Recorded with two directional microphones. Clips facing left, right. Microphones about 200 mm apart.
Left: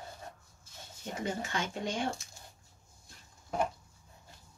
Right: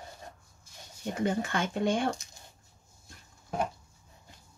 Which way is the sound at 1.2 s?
55° right (ahead or behind).